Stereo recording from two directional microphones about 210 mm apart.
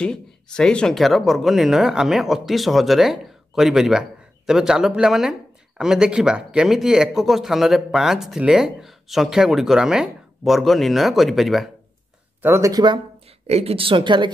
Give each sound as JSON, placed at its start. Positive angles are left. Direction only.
{"t": 0.0, "sound": "speech", "side_deg": 5}
{"t": 12.4, "sound": "a woman's voice", "side_deg": -10}